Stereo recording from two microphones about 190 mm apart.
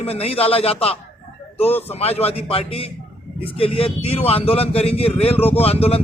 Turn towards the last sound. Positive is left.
turn(degrees=30)  # may be behind; listen again after turning